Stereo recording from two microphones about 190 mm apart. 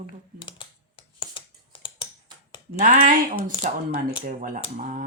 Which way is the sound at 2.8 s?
45° right (ahead or behind).